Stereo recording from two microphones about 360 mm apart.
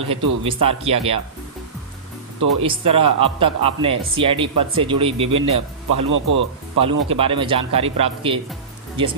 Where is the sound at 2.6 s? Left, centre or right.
Centre.